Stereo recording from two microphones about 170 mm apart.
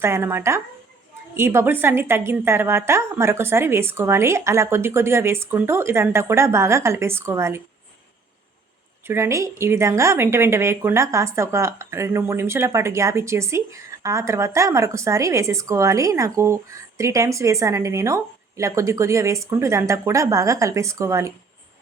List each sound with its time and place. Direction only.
0.0 s a woman's voice: 15° right (ahead or behind)
9.0 s a woman's voice: 15° right (ahead or behind)